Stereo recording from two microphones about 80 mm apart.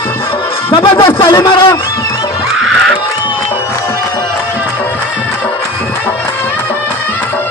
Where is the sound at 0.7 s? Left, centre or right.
Left.